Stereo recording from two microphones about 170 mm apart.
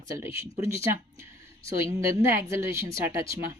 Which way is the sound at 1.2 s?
15° right (ahead or behind).